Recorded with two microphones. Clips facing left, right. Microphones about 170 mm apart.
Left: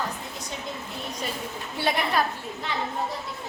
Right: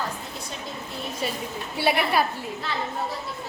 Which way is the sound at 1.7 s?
10° right (ahead or behind).